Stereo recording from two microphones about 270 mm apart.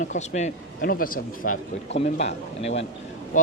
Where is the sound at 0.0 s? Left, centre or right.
Left.